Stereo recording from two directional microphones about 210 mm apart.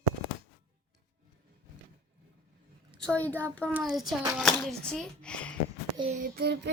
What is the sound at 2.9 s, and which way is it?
A child's voice, 5° left (ahead or behind).